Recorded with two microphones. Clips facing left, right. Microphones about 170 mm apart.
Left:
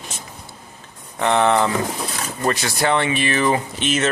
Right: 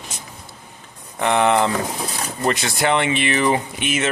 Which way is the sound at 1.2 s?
15° right (ahead or behind).